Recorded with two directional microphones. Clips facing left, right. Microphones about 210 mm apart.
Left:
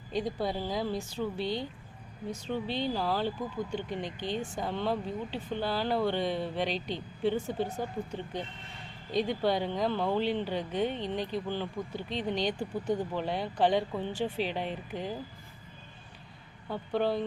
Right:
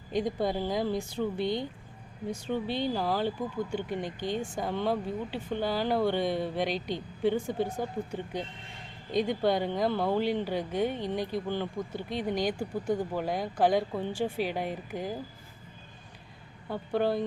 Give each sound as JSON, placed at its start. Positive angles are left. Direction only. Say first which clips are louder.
{"t": 0.1, "sound": "speech", "louder": "right 3 dB", "side_deg": -15}
{"t": 16.6, "sound": "speech", "louder": "right 1 dB", "side_deg": -10}